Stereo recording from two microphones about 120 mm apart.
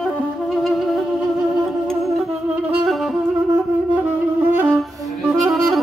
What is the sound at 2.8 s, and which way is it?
Music, centre (ahead or behind).